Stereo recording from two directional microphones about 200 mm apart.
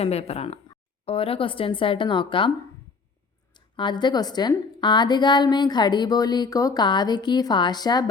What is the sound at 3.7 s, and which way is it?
A woman's voice, 25° left (ahead or behind).